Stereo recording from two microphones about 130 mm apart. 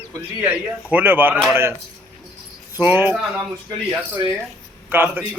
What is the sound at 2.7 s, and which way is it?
Speech, 15° right (ahead or behind).